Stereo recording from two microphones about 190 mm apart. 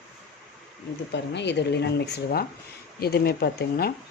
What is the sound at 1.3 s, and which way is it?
Speech, 65° left (ahead or behind).